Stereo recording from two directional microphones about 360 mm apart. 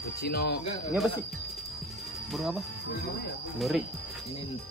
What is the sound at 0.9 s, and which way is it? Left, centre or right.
Speech, centre.